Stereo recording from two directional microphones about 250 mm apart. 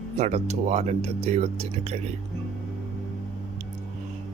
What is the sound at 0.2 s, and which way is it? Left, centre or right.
Speech, right.